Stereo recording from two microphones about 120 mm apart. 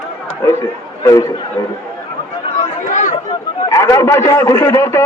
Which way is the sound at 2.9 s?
90° left.